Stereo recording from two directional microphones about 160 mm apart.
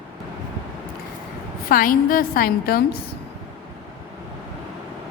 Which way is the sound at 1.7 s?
60° left (ahead or behind).